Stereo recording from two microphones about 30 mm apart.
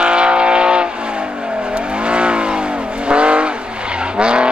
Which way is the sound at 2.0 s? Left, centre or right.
Right.